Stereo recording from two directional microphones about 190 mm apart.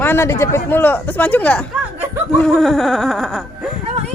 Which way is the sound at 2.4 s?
Centre (ahead or behind).